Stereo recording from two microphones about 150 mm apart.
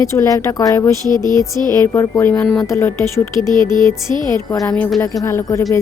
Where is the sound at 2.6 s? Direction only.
20° left (ahead or behind).